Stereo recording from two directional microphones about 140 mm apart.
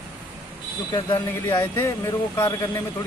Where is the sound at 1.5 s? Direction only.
20° left (ahead or behind).